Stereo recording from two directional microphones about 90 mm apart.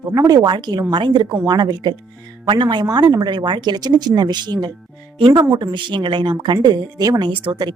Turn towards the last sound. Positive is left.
turn(degrees=-55)  # may be behind; listen again after turning